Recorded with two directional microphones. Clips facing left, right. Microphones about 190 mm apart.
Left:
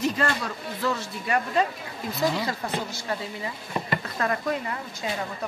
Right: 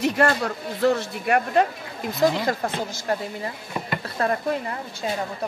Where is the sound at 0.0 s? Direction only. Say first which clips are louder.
Right 5 dB; 65° right (ahead or behind).